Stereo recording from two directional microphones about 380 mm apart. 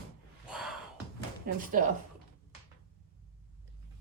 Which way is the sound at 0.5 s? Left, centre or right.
Centre.